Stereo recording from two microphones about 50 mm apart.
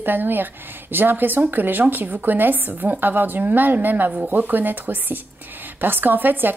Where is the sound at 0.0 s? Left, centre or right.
Right.